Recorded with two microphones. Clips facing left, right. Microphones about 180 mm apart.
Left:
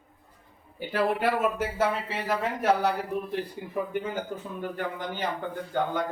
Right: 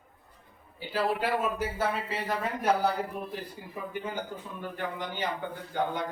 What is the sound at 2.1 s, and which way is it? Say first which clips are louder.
Speech: left 3 dB; 85° left.